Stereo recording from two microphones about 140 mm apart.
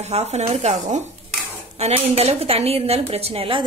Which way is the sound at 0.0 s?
50° right (ahead or behind).